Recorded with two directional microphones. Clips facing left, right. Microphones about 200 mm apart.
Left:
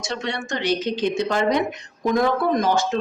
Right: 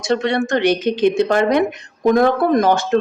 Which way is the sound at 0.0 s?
60° right (ahead or behind).